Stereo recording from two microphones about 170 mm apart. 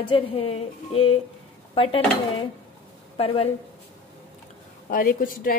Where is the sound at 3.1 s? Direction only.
35° left (ahead or behind).